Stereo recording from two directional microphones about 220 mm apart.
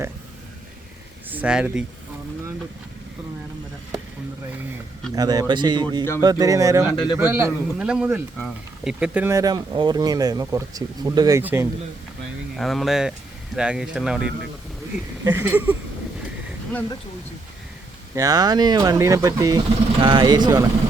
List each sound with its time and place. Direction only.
1.3 s speech: 5° right (ahead or behind)
5.1 s speech: 15° right (ahead or behind)
12.5 s speech: centre (ahead or behind)
15.2 s speech: 15° right (ahead or behind)
18.1 s speech: 15° right (ahead or behind)